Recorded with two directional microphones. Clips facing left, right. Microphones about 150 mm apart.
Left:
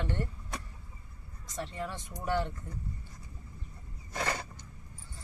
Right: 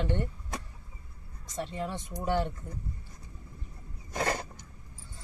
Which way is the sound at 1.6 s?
20° right (ahead or behind).